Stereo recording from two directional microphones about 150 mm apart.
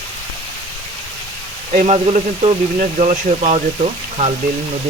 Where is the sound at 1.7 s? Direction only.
55° right (ahead or behind).